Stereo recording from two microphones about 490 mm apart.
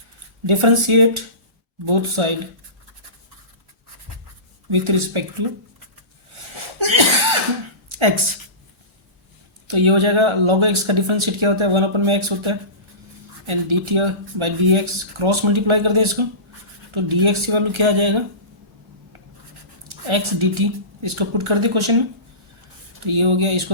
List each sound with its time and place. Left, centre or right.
0.4 s speech: right
4.7 s speech: right
6.3 s a sound: right
9.6 s speech: right
19.9 s speech: right
23.0 s speech: right